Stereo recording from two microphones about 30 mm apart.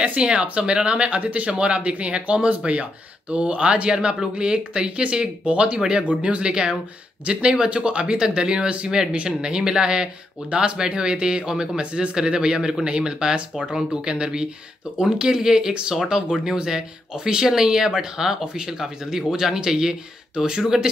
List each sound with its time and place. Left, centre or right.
0.0 s speech: right
6.4 s speech: right
11.8 s speech: right
15.0 s speech: centre